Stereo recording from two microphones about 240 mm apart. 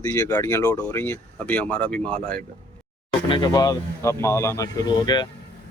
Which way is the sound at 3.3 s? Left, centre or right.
Centre.